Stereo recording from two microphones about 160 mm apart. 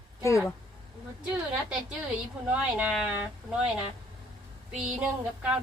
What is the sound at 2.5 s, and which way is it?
Speech, 10° right (ahead or behind).